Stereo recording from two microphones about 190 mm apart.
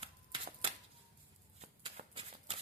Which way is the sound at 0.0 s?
30° right (ahead or behind).